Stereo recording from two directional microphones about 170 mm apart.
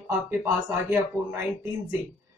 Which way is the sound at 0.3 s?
15° right (ahead or behind).